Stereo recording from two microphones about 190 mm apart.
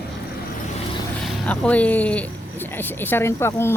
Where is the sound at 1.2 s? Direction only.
5° left (ahead or behind).